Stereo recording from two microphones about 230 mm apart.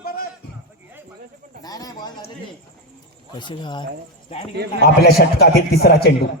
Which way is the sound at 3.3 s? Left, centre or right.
Centre.